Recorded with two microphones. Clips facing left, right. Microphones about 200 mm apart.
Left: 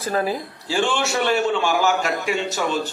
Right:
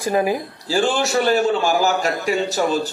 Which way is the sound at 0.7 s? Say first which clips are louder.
Right 3 dB; 40° right (ahead or behind).